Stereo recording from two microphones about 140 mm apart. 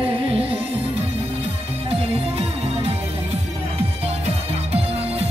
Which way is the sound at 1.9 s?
45° right (ahead or behind).